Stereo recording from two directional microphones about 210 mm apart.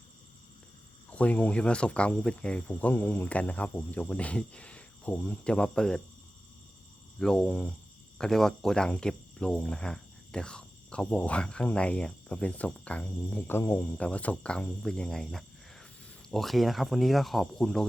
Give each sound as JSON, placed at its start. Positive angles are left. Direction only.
{"t": 1.1, "sound": "speech", "side_deg": 5}
{"t": 7.2, "sound": "speech", "side_deg": 5}